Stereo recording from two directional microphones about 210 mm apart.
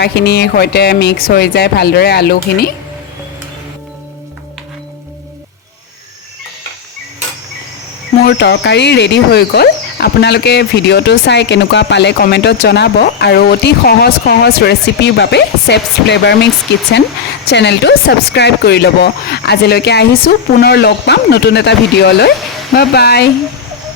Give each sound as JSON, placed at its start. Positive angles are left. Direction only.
{"t": 0.0, "sound": "speech", "side_deg": 50}
{"t": 8.2, "sound": "speech", "side_deg": 55}
{"t": 17.5, "sound": "speech", "side_deg": 55}